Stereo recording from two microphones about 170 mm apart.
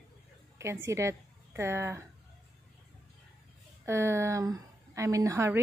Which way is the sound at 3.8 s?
15° right (ahead or behind).